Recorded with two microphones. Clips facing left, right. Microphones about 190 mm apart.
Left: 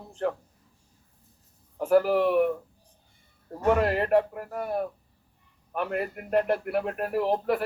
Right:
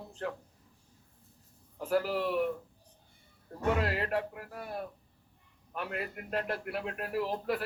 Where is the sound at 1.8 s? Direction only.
50° left (ahead or behind).